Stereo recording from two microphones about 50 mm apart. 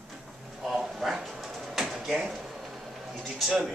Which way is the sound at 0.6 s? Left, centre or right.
Centre.